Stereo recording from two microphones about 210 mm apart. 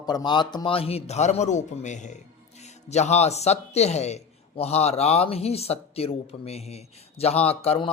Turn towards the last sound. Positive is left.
turn(degrees=30)  # may be behind; listen again after turning